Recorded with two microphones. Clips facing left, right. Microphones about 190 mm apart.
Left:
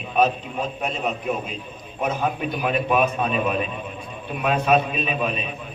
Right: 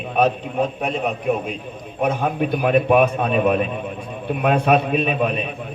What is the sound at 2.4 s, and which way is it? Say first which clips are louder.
A man's voice: right 6 dB; 55° right (ahead or behind).